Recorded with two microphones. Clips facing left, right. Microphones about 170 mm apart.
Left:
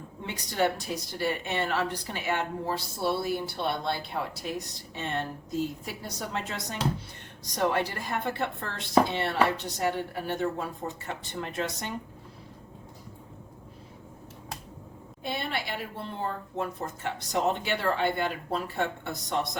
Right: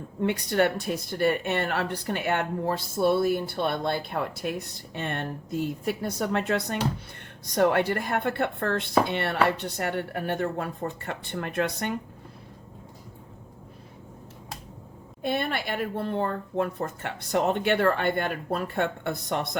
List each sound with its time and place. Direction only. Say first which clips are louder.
0.2 s speech: right 5 dB; 60° right (ahead or behind)
15.2 s speech: right 5 dB; 50° right (ahead or behind)